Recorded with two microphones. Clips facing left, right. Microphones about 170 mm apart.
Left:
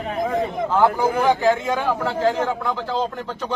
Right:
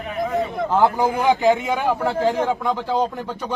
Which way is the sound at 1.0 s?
15° right (ahead or behind).